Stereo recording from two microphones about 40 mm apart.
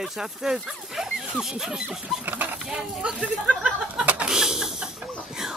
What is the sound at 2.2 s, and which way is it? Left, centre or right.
Speech, right.